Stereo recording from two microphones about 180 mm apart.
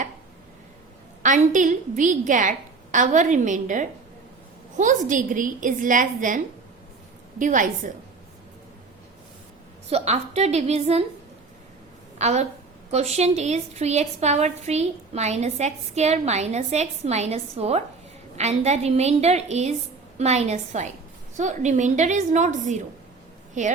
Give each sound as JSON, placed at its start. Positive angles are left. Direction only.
{"t": 1.2, "sound": "a woman's voice", "side_deg": -45}
{"t": 9.9, "sound": "a woman's voice", "side_deg": -35}
{"t": 12.2, "sound": "a woman's voice", "side_deg": -40}